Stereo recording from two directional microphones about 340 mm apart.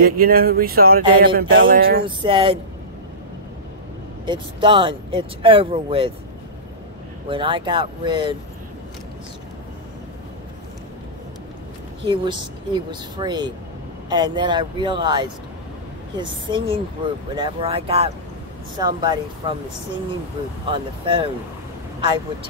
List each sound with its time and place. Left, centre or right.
0.0 s speech: right
2.0 s speech: centre
4.3 s speech: centre
7.2 s speech: centre
12.0 s speech: centre
20.7 s speech: centre